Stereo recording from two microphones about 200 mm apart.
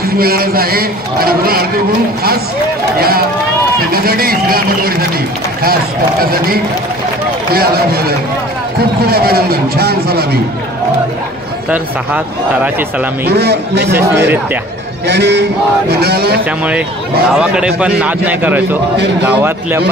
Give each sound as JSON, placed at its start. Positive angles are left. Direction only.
{"t": 0.0, "sound": "a man's voice", "side_deg": -50}
{"t": 3.0, "sound": "a man's voice", "side_deg": -50}
{"t": 7.5, "sound": "a man's voice", "side_deg": -50}
{"t": 9.0, "sound": "a man's voice", "side_deg": -50}
{"t": 11.7, "sound": "speech", "side_deg": -10}
{"t": 13.3, "sound": "a man's voice", "side_deg": -55}
{"t": 15.0, "sound": "a man's voice", "side_deg": -60}
{"t": 16.4, "sound": "a man's voice", "side_deg": -5}